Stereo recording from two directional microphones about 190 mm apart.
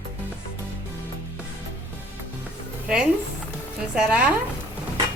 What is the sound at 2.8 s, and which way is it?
Speech, 5° right (ahead or behind).